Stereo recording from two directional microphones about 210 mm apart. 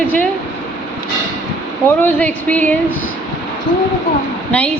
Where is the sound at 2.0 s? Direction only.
10° left (ahead or behind).